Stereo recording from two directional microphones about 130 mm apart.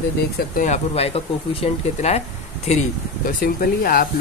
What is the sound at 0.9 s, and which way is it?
Speech, 50° left (ahead or behind).